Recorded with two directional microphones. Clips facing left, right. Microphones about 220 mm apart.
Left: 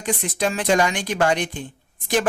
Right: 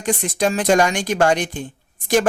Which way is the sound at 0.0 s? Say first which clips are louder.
Right 3 dB; 45° right (ahead or behind).